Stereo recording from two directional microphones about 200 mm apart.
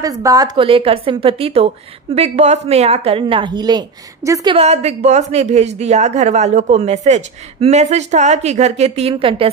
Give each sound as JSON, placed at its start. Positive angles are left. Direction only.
{"t": 0.0, "sound": "a woman's voice", "side_deg": -15}
{"t": 4.6, "sound": "speech", "side_deg": -35}